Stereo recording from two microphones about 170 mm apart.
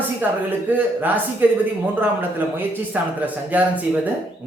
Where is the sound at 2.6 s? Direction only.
10° right (ahead or behind).